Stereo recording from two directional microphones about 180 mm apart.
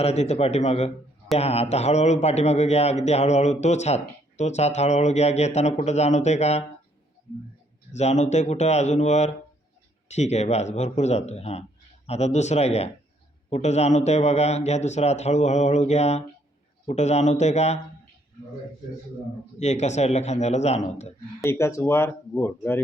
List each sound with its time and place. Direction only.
0.0 s a man's voice: 35° left (ahead or behind)
7.9 s a man's voice: 40° left (ahead or behind)
19.5 s a man's voice: 40° left (ahead or behind)
21.4 s speech: 15° left (ahead or behind)